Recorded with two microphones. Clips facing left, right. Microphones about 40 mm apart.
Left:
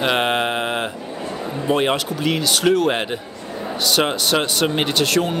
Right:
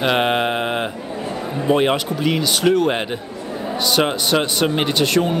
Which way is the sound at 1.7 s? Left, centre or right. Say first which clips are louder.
Right 2 dB; centre.